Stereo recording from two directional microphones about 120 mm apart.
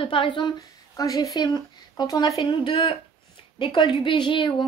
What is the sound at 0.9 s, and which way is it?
A woman's voice, 30° left (ahead or behind).